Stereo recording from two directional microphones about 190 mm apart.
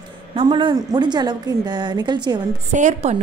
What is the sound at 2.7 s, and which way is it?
Speech, 40° right (ahead or behind).